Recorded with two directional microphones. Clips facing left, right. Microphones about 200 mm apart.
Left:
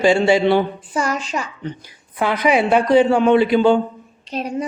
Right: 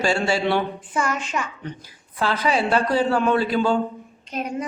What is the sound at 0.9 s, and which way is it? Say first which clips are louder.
Speech: left 3 dB; 35° left (ahead or behind).